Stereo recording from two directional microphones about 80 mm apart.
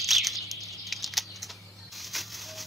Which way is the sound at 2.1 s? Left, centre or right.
Centre.